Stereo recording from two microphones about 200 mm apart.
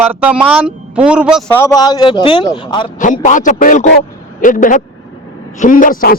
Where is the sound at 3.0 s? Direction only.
40° left (ahead or behind).